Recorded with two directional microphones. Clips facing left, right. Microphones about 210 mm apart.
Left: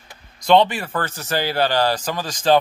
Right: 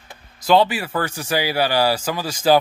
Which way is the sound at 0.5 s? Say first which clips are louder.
Left 1 dB; 5° right (ahead or behind).